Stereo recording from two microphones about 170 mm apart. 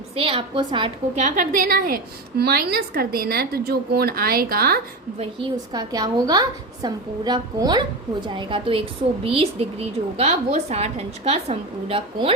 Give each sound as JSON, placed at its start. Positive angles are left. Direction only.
{"t": 0.2, "sound": "a woman's voice", "side_deg": -35}
{"t": 1.2, "sound": "a woman's voice", "side_deg": -50}
{"t": 2.4, "sound": "a woman's voice", "side_deg": -70}
{"t": 5.1, "sound": "a woman's voice", "side_deg": -35}
{"t": 5.7, "sound": "a woman's voice", "side_deg": -20}